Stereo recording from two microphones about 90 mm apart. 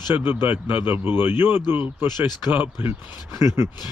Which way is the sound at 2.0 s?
50° left (ahead or behind).